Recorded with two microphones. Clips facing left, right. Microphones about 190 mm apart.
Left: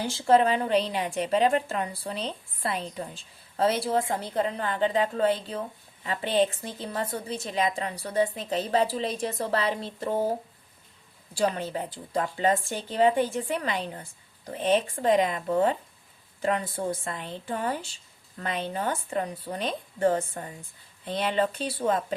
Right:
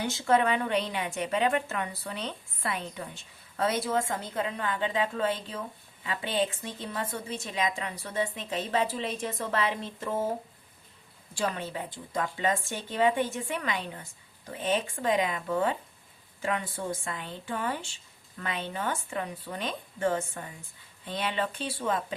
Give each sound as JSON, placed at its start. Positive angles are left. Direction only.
{"t": 0.0, "sound": "a woman's voice", "side_deg": 30}
{"t": 11.3, "sound": "a woman's voice", "side_deg": 40}